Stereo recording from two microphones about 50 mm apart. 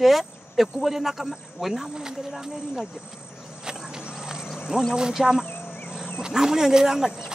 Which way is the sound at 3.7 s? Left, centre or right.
Centre.